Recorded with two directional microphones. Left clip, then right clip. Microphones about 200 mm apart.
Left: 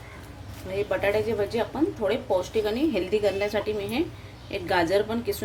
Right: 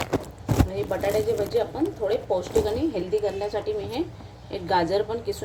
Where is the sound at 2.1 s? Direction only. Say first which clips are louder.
Right 1 dB; 25° left (ahead or behind).